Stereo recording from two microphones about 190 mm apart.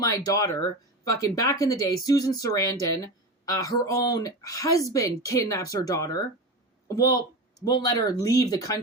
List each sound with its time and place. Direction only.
0.0 s speech: 20° left (ahead or behind)